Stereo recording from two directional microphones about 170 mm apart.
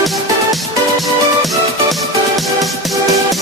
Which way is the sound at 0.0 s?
Centre (ahead or behind).